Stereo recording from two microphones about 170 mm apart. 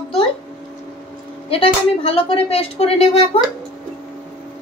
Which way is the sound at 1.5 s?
35° left (ahead or behind).